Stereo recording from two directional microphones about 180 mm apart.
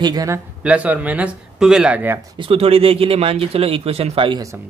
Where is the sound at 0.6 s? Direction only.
10° right (ahead or behind).